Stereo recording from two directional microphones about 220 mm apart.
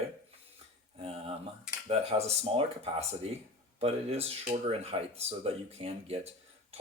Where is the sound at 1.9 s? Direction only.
25° right (ahead or behind).